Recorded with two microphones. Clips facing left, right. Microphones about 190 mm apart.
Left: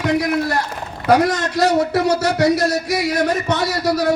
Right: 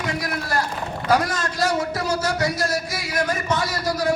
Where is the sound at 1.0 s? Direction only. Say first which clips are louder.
Left 6 dB; 70° left (ahead or behind).